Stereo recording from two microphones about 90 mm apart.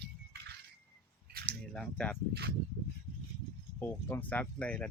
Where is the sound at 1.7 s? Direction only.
10° left (ahead or behind).